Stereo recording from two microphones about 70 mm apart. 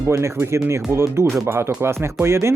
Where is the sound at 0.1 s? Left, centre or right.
Right.